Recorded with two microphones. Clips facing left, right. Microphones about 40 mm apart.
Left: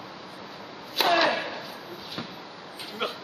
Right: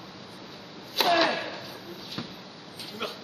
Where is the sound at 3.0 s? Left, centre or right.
Left.